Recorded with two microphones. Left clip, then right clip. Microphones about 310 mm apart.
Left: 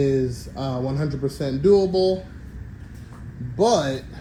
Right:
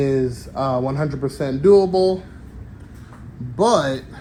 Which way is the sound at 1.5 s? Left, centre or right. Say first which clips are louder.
Right 4 dB; right.